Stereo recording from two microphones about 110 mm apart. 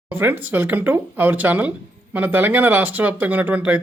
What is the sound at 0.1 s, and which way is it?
Speech, 20° right (ahead or behind).